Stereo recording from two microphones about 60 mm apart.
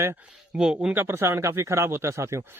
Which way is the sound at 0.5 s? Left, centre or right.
Centre.